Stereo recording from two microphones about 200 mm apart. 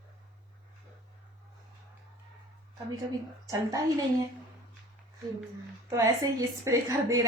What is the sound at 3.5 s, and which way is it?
Speech, 15° right (ahead or behind).